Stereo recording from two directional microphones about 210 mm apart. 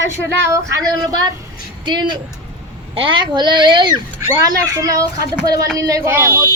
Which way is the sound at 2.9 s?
25° right (ahead or behind).